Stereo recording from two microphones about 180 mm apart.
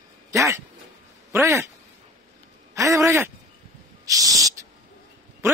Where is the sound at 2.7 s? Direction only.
20° right (ahead or behind).